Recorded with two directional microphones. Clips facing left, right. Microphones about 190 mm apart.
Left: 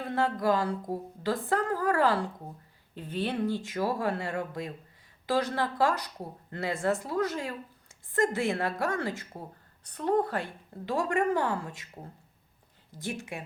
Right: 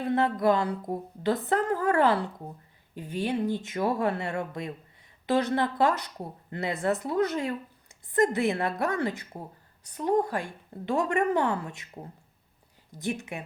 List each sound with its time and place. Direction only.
0.0 s speech: 20° right (ahead or behind)
2.9 s a woman's voice: 10° right (ahead or behind)
13.0 s speech: 20° right (ahead or behind)